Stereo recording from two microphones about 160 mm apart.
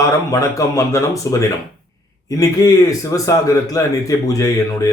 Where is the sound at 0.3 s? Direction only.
20° left (ahead or behind).